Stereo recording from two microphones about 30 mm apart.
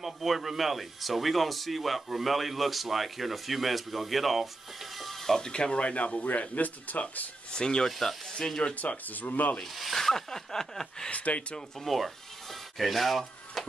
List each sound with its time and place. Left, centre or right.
0.0 s speech: centre
4.9 s music: centre
5.4 s speech: left
5.8 s speech: left
6.5 s speech: left
7.5 s speech: left
8.7 s speech: left
9.9 s speech: centre
11.1 s speech: left
11.8 s rub: centre